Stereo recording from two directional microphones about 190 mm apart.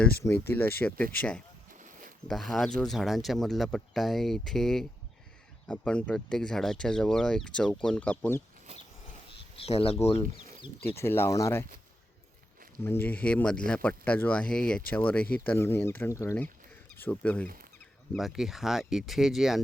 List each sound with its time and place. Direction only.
0.3 s speech: 10° left (ahead or behind)
9.6 s speech: 30° left (ahead or behind)
10.9 s speech: 10° left (ahead or behind)
12.8 s speech: 10° left (ahead or behind)